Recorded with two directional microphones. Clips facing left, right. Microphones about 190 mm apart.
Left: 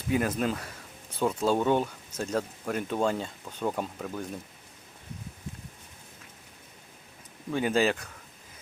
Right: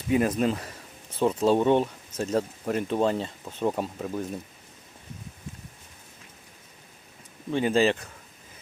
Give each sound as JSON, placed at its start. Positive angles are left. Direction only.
{"t": 0.1, "sound": "speech", "side_deg": 0}
{"t": 1.5, "sound": "speech", "side_deg": -25}
{"t": 1.7, "sound": "speech", "side_deg": -5}
{"t": 3.6, "sound": "speech", "side_deg": -10}
{"t": 7.5, "sound": "speech", "side_deg": 0}